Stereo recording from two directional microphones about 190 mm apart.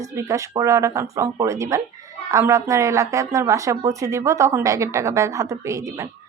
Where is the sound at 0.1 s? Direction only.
15° right (ahead or behind).